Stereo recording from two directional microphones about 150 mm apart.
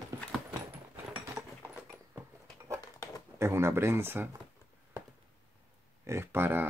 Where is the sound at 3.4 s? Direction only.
15° right (ahead or behind).